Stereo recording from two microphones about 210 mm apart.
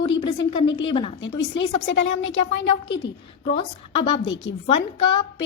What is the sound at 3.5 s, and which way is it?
Speech, 25° left (ahead or behind).